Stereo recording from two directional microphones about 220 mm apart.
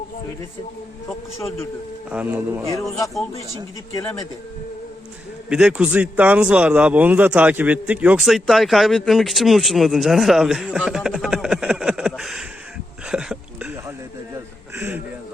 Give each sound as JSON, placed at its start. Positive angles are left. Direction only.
{"t": 1.4, "sound": "speech", "side_deg": 10}
{"t": 2.0, "sound": "speech", "side_deg": -5}
{"t": 3.9, "sound": "speech", "side_deg": 15}
{"t": 5.5, "sound": "speech", "side_deg": -5}
{"t": 13.1, "sound": "a sound", "side_deg": -5}